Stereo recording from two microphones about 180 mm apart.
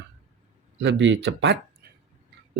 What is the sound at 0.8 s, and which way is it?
Speech, 90° right.